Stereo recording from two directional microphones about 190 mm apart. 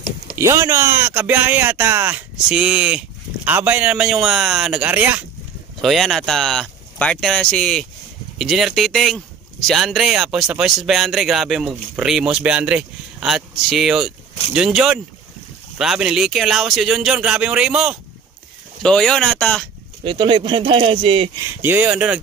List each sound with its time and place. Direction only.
0.4 s speech: 15° right (ahead or behind); by 19.6 s 5° left (ahead or behind)
20.0 s speech: 25° right (ahead or behind)
21.5 s speech: 10° right (ahead or behind)